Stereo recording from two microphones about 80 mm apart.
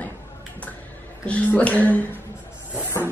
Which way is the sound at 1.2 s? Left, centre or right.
Centre.